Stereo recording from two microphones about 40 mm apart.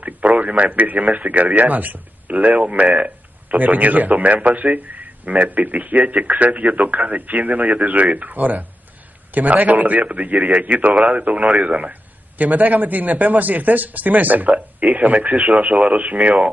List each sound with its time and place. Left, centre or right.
0.0 s a man's voice: right